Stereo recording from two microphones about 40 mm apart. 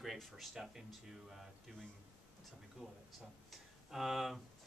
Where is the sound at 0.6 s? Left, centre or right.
Centre.